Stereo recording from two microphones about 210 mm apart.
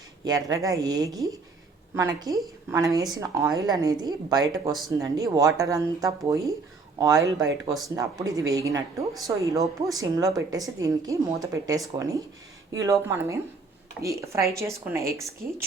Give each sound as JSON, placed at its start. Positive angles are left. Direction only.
{"t": 0.3, "sound": "a woman's voice", "side_deg": -15}
{"t": 12.8, "sound": "a woman's voice", "side_deg": -15}